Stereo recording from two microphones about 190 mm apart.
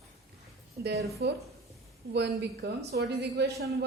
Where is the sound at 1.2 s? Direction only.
65° right (ahead or behind).